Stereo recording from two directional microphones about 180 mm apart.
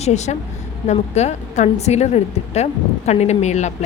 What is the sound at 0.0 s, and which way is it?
A woman's voice, 40° left (ahead or behind).